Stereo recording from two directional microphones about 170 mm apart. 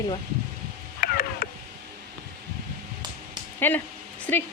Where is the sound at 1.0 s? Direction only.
60° left (ahead or behind).